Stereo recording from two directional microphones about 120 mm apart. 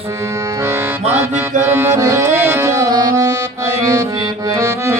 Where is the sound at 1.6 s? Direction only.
20° right (ahead or behind).